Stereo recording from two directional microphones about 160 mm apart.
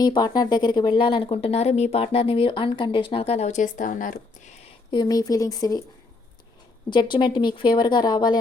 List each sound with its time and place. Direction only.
0.0 s speech: 25° left (ahead or behind); by 4.5 s 55° left (ahead or behind)
4.9 s speech: 25° left (ahead or behind)
6.9 s speech: 30° left (ahead or behind)